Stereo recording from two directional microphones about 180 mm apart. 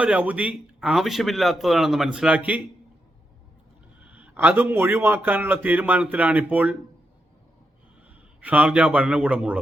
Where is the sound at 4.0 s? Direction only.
10° right (ahead or behind).